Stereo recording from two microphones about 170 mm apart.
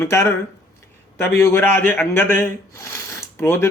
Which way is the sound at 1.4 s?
15° left (ahead or behind).